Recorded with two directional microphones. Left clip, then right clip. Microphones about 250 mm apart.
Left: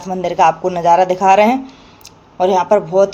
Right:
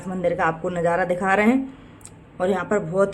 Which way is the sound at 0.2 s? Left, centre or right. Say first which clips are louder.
Left 9 dB; centre.